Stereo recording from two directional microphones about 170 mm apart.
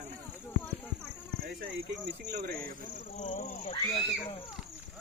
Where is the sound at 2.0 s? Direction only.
75° right (ahead or behind).